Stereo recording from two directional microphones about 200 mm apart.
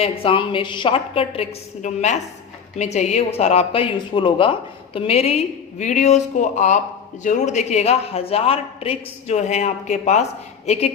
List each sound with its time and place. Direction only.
0.0 s a woman's voice: 25° left (ahead or behind)